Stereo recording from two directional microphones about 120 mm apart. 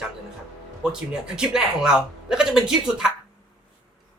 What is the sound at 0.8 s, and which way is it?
A man's voice, 5° right (ahead or behind).